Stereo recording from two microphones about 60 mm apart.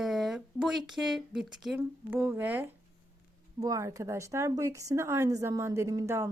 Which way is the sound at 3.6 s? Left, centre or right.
Right.